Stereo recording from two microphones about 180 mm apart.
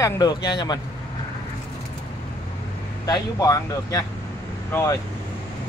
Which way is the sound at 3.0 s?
20° left (ahead or behind).